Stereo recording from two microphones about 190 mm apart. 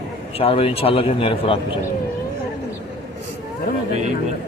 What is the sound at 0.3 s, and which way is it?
Speech, 30° left (ahead or behind).